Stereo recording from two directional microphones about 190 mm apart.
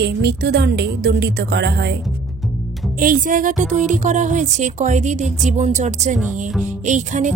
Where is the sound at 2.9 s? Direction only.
45° right (ahead or behind).